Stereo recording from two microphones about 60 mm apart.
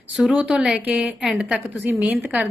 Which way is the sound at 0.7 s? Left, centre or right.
Right.